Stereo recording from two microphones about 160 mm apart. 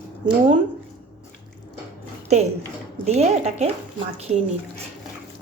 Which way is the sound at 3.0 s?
45° right (ahead or behind).